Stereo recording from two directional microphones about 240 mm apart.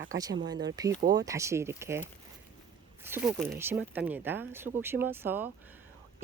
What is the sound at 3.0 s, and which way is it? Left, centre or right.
Speech, centre.